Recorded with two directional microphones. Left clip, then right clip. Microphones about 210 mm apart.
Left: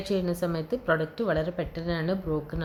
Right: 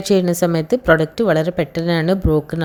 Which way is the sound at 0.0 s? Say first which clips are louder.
Right 12 dB; 40° right (ahead or behind).